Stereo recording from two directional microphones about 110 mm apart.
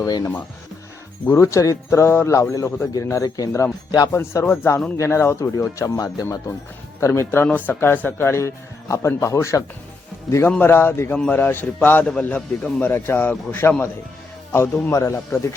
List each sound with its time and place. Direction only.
0.0 s speech: 35° left (ahead or behind)
1.3 s a man's voice: 25° left (ahead or behind)